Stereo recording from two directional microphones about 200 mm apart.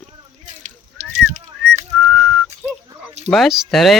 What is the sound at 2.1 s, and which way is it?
Whistling, centre (ahead or behind).